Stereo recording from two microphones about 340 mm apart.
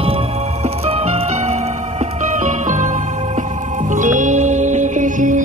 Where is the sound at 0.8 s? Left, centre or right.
Centre.